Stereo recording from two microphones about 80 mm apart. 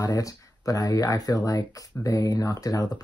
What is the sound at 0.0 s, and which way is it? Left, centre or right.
Speech, left.